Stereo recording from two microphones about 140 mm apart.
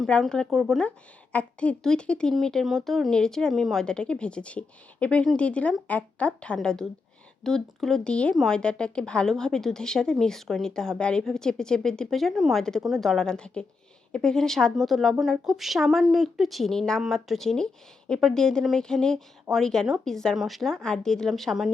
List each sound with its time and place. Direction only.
0.0 s a woman's voice: 5° left (ahead or behind)